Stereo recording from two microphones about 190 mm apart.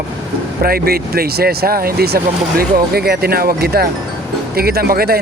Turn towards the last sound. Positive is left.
turn(degrees=-55)  # may be behind; listen again after turning